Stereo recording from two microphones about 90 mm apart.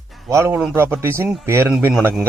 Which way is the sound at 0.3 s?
25° right (ahead or behind).